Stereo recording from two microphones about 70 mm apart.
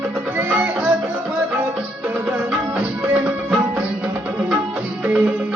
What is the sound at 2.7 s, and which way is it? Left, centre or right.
Music, right.